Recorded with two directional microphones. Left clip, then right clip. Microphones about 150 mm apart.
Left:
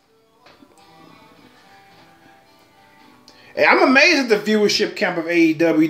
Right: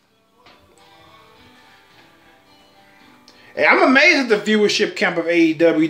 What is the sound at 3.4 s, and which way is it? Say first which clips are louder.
Speech: even; 5° left (ahead or behind).